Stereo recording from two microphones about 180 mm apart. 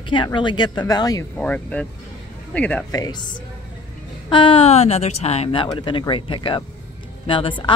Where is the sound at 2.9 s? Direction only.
20° left (ahead or behind).